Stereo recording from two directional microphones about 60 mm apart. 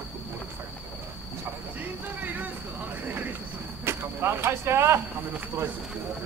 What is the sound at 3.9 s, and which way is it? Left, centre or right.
Vehicle, right.